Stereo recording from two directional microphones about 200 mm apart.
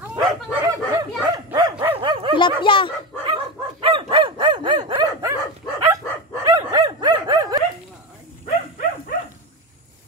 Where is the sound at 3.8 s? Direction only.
25° right (ahead or behind).